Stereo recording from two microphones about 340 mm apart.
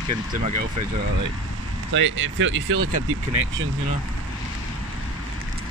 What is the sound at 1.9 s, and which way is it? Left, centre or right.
Speech, right.